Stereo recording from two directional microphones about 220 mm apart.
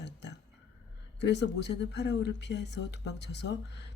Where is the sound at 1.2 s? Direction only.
50° left (ahead or behind).